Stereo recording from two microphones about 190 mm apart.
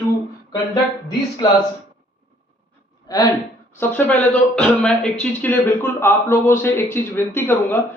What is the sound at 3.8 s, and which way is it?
Speech, 5° left (ahead or behind).